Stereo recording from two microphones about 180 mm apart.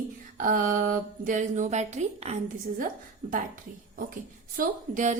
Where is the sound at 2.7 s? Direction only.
50° right (ahead or behind).